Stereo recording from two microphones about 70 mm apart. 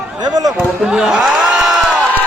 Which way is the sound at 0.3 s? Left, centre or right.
Right.